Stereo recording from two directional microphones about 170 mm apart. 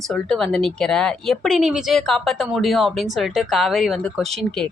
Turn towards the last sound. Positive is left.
turn(degrees=0)  # may be behind; listen again after turning